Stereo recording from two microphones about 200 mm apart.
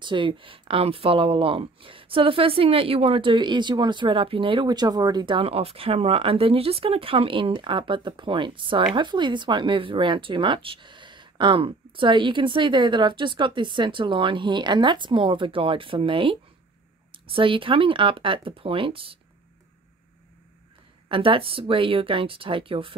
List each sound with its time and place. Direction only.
0.0 s speech: 25° right (ahead or behind)
21.1 s speech: 25° right (ahead or behind)